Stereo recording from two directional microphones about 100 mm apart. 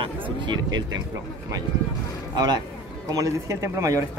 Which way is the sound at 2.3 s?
45° right (ahead or behind).